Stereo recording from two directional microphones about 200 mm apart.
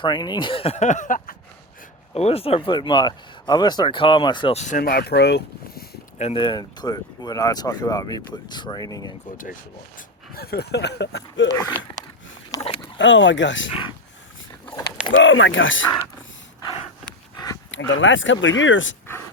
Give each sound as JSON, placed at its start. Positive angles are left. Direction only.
{"t": 0.0, "sound": "speech", "side_deg": 20}
{"t": 2.1, "sound": "speech", "side_deg": 30}
{"t": 6.1, "sound": "speech", "side_deg": 30}
{"t": 10.3, "sound": "speech", "side_deg": 50}
{"t": 13.0, "sound": "speech", "side_deg": 65}
{"t": 15.1, "sound": "speech", "side_deg": 75}
{"t": 17.3, "sound": "dog", "side_deg": 20}
{"t": 17.7, "sound": "speech", "side_deg": 70}